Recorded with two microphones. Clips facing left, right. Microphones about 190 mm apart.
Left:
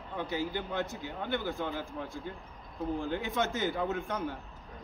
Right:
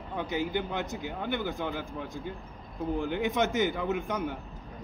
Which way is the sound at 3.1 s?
20° right (ahead or behind).